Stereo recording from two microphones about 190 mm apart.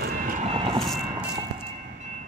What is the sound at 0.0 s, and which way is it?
Vehicle, 45° right (ahead or behind).